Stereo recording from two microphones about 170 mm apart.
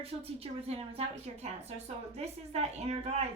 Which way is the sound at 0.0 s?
35° right (ahead or behind).